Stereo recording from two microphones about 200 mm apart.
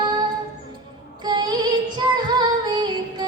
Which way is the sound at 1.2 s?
20° right (ahead or behind).